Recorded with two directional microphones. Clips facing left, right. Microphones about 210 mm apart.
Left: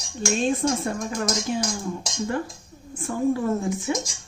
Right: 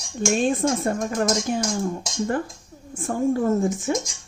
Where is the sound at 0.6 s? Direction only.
50° right (ahead or behind).